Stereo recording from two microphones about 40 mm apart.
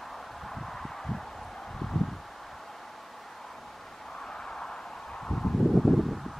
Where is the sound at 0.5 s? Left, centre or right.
Centre.